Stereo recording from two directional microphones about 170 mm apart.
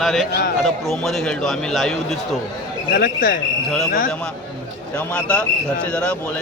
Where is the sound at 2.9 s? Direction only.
55° left (ahead or behind).